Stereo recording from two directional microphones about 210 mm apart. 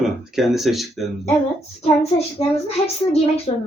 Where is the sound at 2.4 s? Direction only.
30° left (ahead or behind).